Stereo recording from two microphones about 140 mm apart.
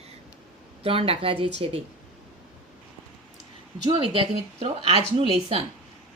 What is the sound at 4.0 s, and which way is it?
A woman's voice, 40° right (ahead or behind).